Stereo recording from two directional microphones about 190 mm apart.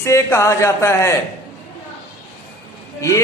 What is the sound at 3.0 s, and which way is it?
Speech, 15° left (ahead or behind).